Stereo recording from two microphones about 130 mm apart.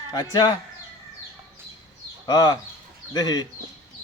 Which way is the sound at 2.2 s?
30° left (ahead or behind).